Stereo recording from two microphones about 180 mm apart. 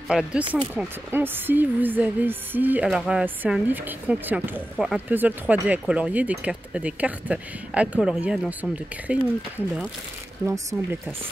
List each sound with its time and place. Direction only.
0.1 s speech: 5° right (ahead or behind)
10.4 s speech: 15° right (ahead or behind)